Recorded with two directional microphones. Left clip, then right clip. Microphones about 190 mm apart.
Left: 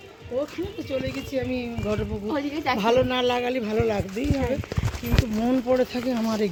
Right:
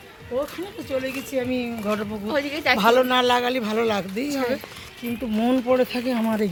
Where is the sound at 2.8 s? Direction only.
5° left (ahead or behind).